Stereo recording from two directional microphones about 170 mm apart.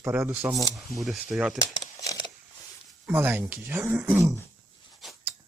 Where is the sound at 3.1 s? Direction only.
10° right (ahead or behind).